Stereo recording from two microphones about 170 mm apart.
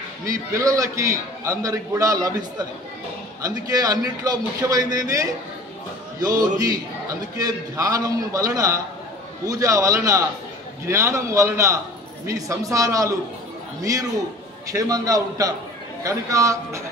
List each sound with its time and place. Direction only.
0.2 s a man's voice: 20° right (ahead or behind)
3.4 s a man's voice: 20° right (ahead or behind)
7.3 s a man's voice: 20° right (ahead or behind)